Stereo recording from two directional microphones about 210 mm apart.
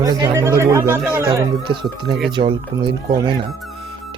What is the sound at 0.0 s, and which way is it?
Speech, 15° right (ahead or behind).